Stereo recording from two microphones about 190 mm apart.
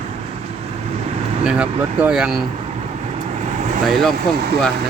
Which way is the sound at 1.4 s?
5° right (ahead or behind).